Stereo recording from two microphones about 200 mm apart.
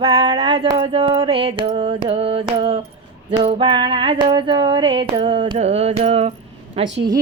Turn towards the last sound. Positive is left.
turn(degrees=-30)  # may be behind; listen again after turning